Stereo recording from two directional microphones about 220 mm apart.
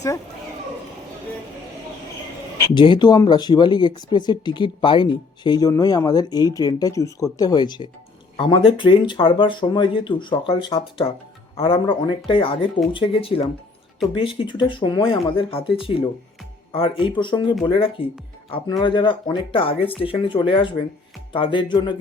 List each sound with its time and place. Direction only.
2.7 s speech: 20° left (ahead or behind)